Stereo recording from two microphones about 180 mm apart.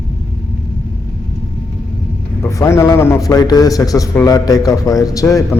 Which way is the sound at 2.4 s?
15° left (ahead or behind).